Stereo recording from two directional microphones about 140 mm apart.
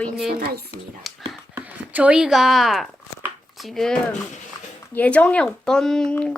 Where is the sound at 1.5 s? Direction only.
10° right (ahead or behind).